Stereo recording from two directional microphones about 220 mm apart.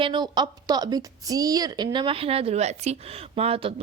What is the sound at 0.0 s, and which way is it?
A woman's voice, 20° right (ahead or behind).